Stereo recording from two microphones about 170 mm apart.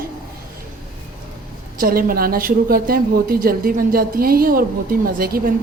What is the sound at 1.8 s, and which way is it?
A woman's voice, 60° right (ahead or behind).